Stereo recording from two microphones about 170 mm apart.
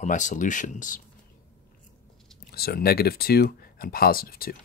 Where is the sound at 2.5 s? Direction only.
65° left (ahead or behind).